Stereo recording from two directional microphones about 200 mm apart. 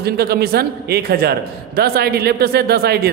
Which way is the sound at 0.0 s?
50° right (ahead or behind).